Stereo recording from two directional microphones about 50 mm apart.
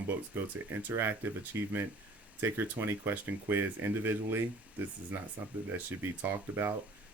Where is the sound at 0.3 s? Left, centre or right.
Right.